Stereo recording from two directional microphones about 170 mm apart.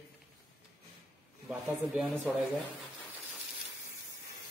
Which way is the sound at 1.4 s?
5° right (ahead or behind).